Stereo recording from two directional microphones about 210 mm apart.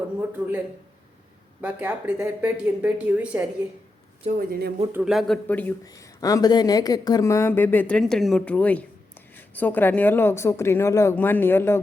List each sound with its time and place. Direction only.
0.2 s speech: 10° right (ahead or behind)
1.6 s speech: 5° right (ahead or behind)
4.2 s speech: 30° right (ahead or behind)
4.9 s speech: 5° right (ahead or behind); by 11.8 s 10° left (ahead or behind)